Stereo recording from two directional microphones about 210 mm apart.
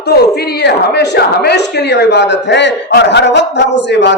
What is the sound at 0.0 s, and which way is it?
A man's voice, 50° left (ahead or behind).